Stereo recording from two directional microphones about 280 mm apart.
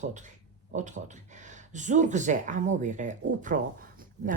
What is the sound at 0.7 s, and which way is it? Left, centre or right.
A woman's voice, right.